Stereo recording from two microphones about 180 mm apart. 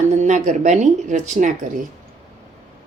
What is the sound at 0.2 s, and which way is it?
Speech, 40° right (ahead or behind).